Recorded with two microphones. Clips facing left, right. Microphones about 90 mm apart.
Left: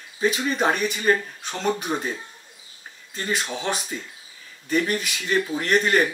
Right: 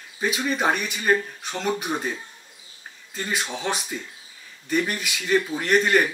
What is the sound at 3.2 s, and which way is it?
Speech, centre (ahead or behind).